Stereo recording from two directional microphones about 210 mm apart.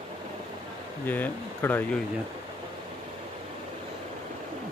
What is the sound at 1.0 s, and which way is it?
Speech, 10° left (ahead or behind).